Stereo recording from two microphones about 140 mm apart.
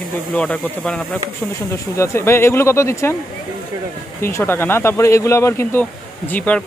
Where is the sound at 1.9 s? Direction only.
20° left (ahead or behind).